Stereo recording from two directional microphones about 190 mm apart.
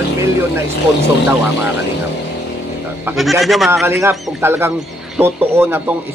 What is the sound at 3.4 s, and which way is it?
Speech, centre (ahead or behind).